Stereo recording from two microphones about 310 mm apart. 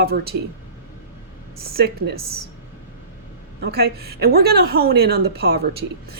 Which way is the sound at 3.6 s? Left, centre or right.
Right.